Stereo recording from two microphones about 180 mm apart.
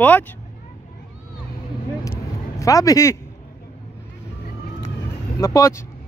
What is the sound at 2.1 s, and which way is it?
Vehicle, 15° left (ahead or behind).